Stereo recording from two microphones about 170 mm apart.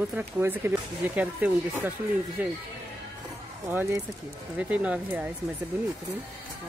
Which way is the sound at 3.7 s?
15° right (ahead or behind).